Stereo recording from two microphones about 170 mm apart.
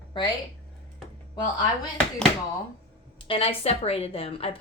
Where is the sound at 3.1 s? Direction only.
30° left (ahead or behind).